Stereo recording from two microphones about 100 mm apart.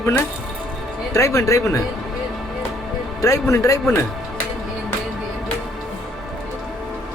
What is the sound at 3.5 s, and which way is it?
Speech, 30° left (ahead or behind).